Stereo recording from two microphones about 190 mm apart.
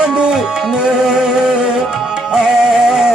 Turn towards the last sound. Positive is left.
turn(degrees=-5)  # may be behind; listen again after turning